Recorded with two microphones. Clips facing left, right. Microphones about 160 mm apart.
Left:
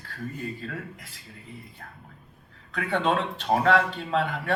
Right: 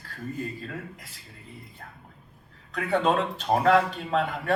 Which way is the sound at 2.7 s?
40° right (ahead or behind).